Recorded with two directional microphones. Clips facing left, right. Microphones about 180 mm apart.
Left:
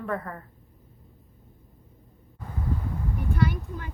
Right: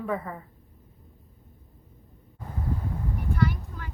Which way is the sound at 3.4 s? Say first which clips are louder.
Even; 20° left (ahead or behind).